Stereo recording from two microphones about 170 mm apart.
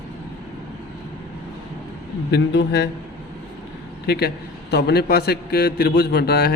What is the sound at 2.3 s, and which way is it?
Speech, 85° left.